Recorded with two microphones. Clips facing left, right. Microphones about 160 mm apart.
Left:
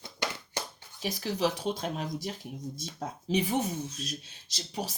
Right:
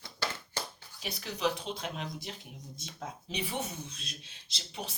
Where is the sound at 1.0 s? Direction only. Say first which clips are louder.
Left 4 dB; 40° left (ahead or behind).